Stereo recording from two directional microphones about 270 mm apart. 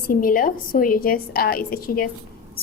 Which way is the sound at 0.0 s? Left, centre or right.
Left.